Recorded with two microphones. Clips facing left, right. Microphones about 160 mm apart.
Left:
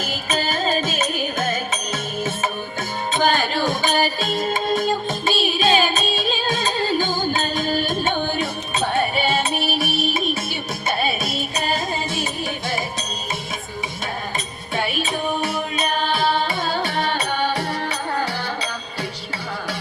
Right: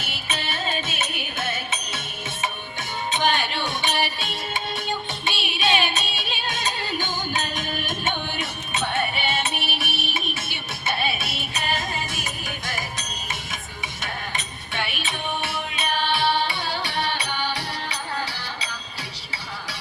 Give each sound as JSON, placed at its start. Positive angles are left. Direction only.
{"t": 0.0, "sound": "music", "side_deg": 40}
{"t": 14.3, "sound": "music", "side_deg": 40}